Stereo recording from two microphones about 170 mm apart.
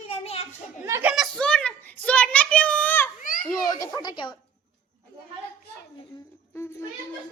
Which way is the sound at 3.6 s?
20° left (ahead or behind).